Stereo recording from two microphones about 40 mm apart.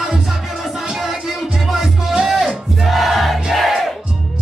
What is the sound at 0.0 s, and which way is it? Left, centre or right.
Music, centre.